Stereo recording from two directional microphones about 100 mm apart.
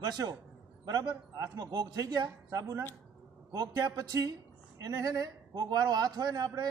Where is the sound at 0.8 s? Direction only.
40° right (ahead or behind).